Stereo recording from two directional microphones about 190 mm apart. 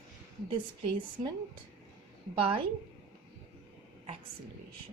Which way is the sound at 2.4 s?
30° right (ahead or behind).